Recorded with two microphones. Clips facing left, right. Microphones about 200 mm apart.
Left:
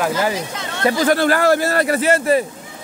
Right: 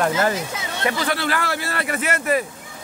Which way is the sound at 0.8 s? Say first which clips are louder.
Left 8 dB; 45° left (ahead or behind).